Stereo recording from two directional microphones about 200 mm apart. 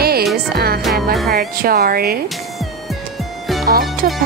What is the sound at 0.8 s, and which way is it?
Speech, centre (ahead or behind).